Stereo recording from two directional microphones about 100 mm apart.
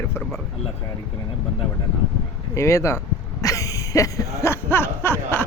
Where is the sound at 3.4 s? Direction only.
35° left (ahead or behind).